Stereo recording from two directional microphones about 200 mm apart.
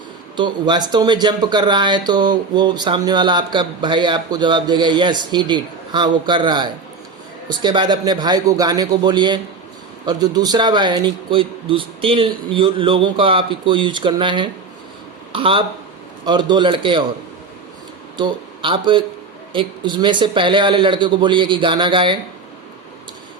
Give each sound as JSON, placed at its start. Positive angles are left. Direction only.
{"t": 0.3, "sound": "speech", "side_deg": -20}
{"t": 18.2, "sound": "speech", "side_deg": -25}